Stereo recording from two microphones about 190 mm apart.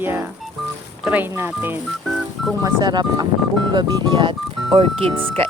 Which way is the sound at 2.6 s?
20° right (ahead or behind).